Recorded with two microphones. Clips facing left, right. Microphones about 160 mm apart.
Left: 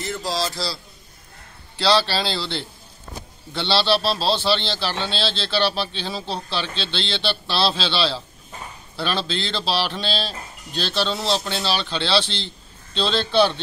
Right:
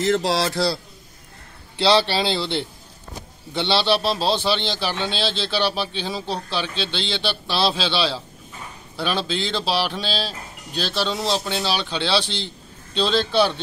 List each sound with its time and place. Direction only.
0.0 s a man's voice: 85° right; by 0.7 s 60° right (ahead or behind)
1.8 s a man's voice: 20° right (ahead or behind)